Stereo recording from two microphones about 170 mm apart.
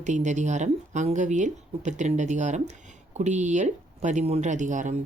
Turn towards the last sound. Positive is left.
turn(degrees=-45)  # may be behind; listen again after turning